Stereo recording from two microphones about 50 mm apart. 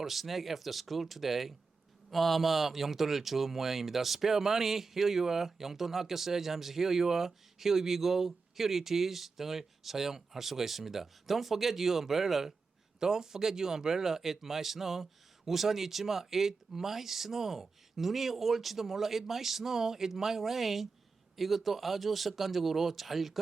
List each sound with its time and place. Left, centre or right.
0.0 s speech: centre